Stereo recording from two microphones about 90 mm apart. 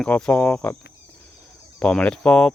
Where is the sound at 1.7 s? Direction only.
15° left (ahead or behind).